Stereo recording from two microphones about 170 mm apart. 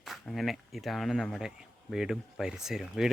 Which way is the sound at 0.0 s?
Centre (ahead or behind).